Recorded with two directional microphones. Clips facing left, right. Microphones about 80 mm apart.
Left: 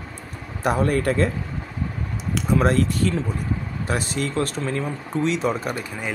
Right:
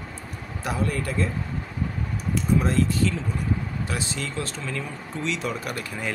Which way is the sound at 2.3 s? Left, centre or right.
Left.